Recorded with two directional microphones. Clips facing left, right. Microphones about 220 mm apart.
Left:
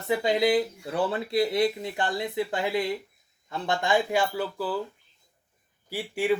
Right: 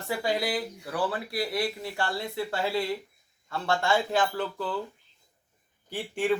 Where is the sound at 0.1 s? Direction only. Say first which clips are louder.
Left 6 dB; 20° left (ahead or behind); by 4.8 s 5° left (ahead or behind).